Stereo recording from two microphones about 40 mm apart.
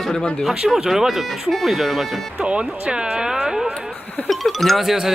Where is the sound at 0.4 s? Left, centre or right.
Centre.